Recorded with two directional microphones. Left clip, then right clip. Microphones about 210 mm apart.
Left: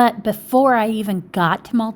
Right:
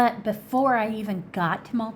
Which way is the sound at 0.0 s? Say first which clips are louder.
Left 6 dB; 40° left (ahead or behind).